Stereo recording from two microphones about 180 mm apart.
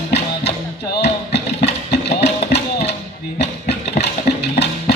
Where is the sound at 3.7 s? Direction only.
70° left (ahead or behind).